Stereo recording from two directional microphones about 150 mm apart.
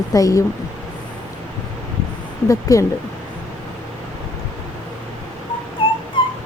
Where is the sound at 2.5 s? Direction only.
20° left (ahead or behind).